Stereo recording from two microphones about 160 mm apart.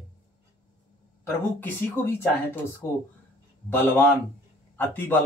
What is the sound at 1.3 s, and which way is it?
Speech, 10° left (ahead or behind).